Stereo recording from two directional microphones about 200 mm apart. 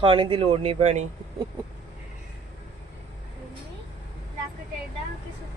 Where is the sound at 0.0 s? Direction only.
25° right (ahead or behind).